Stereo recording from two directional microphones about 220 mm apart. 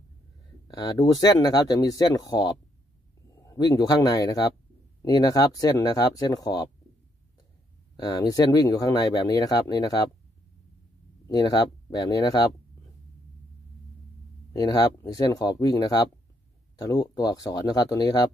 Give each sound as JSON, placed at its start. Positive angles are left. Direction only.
{"t": 0.7, "sound": "speech", "side_deg": 20}
{"t": 7.9, "sound": "speech", "side_deg": 15}
{"t": 11.2, "sound": "speech", "side_deg": 15}
{"t": 14.5, "sound": "speech", "side_deg": 15}